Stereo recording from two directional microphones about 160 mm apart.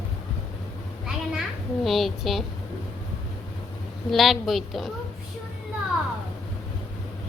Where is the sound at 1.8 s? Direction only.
Centre (ahead or behind).